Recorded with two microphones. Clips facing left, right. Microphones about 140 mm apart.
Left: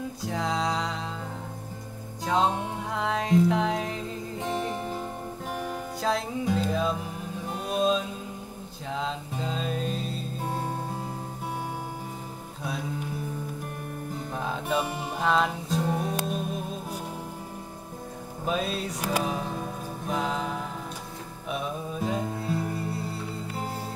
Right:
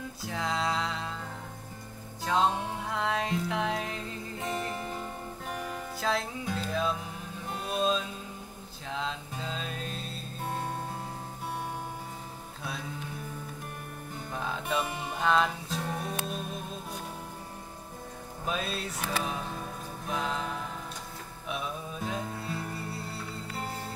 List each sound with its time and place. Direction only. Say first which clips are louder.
0.2 s music: left 3 dB; centre (ahead or behind)
2.2 s music: left 2 dB; centre (ahead or behind)
14.3 s music: left 3 dB; 5° left (ahead or behind)
15.9 s music: left 6 dB; 15° left (ahead or behind)
18.4 s music: left 5 dB; centre (ahead or behind)